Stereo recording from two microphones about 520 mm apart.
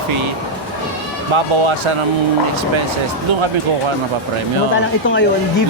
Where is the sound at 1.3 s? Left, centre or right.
Right.